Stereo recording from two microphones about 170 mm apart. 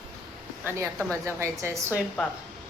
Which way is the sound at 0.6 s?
15° right (ahead or behind).